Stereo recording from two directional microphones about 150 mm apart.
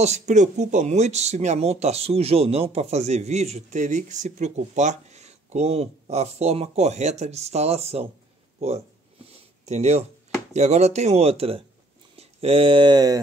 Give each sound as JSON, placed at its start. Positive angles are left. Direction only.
{"t": 0.0, "sound": "speech", "side_deg": -50}